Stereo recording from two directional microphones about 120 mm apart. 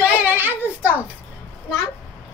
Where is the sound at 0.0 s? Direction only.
15° right (ahead or behind).